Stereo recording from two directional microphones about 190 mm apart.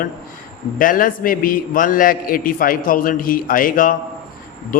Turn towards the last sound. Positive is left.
turn(degrees=45)  # may be behind; listen again after turning